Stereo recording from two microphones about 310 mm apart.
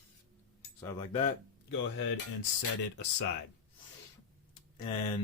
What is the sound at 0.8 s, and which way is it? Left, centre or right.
Speech, centre.